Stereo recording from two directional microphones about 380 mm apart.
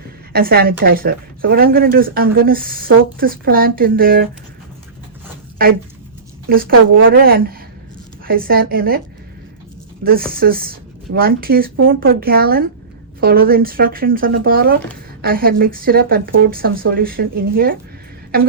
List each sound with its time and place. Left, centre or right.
0.3 s speech: right
6.5 s speech: right
10.0 s speech: right